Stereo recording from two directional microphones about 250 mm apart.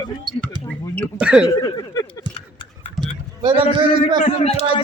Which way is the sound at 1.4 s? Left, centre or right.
Centre.